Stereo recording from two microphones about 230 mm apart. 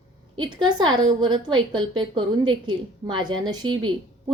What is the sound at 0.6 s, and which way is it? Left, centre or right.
A woman's voice, centre.